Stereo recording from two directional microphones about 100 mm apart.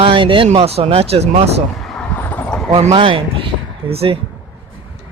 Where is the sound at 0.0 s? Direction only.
60° right (ahead or behind); by 1.6 s 90° right.